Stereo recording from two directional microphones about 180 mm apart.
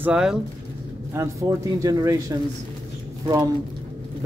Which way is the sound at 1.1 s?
15° right (ahead or behind).